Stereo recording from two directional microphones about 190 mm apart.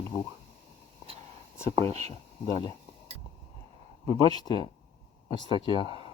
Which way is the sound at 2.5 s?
20° left (ahead or behind).